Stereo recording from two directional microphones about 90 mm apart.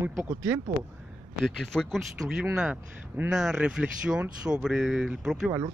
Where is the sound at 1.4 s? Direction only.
5° left (ahead or behind).